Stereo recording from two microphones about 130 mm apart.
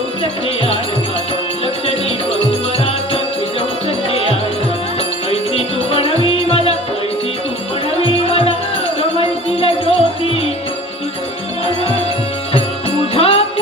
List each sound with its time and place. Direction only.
0.2 s music: 45° left (ahead or behind)
4.1 s music: 50° left (ahead or behind)
8.0 s music: 50° left (ahead or behind)
12.5 s music: 50° left (ahead or behind)